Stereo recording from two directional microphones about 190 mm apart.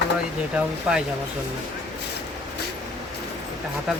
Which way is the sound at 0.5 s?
5° right (ahead or behind).